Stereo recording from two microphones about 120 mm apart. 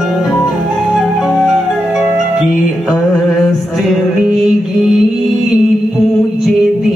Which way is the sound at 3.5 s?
Centre (ahead or behind).